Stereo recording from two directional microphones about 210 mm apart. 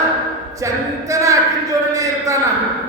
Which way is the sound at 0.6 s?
15° right (ahead or behind).